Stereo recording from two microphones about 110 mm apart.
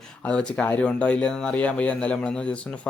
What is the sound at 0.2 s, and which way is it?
Speech, 10° left (ahead or behind).